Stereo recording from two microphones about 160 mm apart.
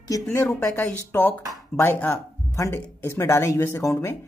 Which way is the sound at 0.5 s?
10° left (ahead or behind).